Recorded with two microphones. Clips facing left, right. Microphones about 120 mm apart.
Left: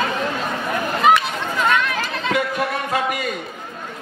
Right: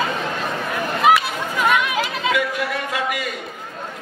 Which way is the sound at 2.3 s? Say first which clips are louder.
Left 3 dB; 40° left (ahead or behind).